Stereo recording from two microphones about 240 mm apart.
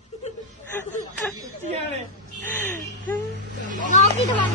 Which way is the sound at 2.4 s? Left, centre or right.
Centre.